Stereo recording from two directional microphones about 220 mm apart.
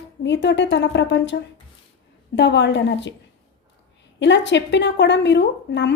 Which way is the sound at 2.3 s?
55° left (ahead or behind).